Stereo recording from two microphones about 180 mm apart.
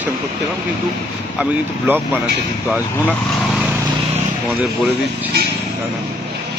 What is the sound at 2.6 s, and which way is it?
Speech, 5° right (ahead or behind).